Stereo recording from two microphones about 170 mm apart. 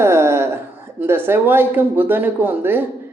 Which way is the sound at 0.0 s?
15° right (ahead or behind).